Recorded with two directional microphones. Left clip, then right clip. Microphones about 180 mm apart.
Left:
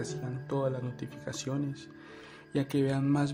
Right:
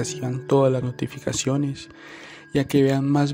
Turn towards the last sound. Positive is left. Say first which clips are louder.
# right 10 dB
turn(degrees=-35)  # may be behind; listen again after turning